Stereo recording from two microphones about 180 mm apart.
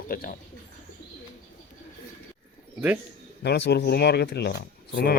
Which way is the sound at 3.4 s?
70° left (ahead or behind).